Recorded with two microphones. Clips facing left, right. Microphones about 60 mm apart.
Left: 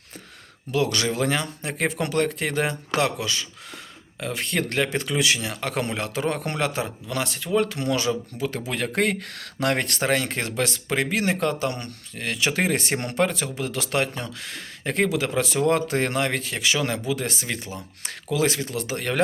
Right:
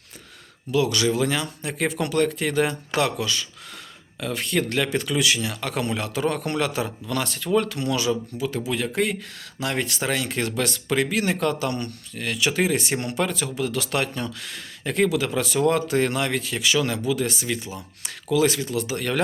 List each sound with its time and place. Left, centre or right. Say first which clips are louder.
0.7 s speech: right 2 dB; left